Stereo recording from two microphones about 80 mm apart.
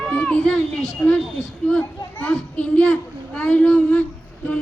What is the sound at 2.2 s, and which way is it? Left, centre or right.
Child singing, centre.